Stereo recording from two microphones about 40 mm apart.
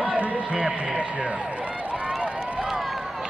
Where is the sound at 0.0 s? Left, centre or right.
Right.